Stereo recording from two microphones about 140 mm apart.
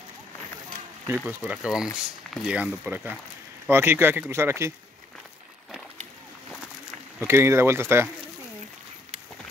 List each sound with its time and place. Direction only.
1.2 s speech: 5° right (ahead or behind)
7.2 s speech: 20° right (ahead or behind)